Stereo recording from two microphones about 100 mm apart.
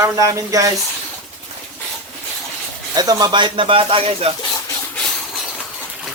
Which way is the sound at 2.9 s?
40° right (ahead or behind).